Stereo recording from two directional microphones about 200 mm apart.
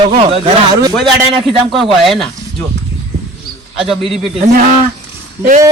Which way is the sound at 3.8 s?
Centre (ahead or behind).